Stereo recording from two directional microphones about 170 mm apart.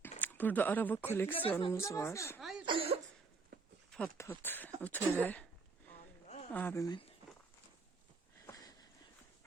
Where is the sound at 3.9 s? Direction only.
5° left (ahead or behind).